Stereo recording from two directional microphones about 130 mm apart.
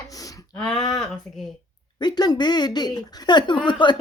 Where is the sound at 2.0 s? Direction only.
35° left (ahead or behind).